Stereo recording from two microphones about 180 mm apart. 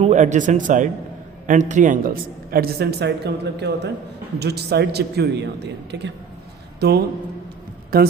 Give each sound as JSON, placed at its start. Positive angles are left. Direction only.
{"t": 0.0, "sound": "a man's voice", "side_deg": -40}
{"t": 6.7, "sound": "a man's voice", "side_deg": -60}